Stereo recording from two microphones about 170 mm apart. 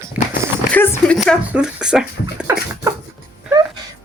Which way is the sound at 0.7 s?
10° left (ahead or behind).